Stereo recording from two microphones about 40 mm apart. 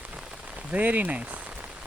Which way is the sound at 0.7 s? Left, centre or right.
Right.